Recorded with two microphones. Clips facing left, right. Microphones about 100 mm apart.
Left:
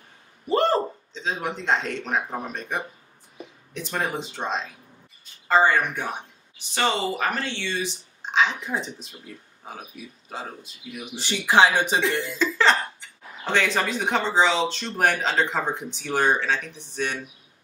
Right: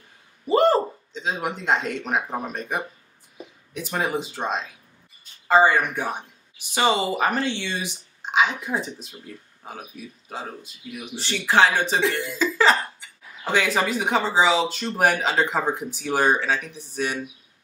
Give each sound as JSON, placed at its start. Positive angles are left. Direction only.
{"t": 0.5, "sound": "a man's voice", "side_deg": -5}
{"t": 11.1, "sound": "speech", "side_deg": 15}
{"t": 12.0, "sound": "speech", "side_deg": 0}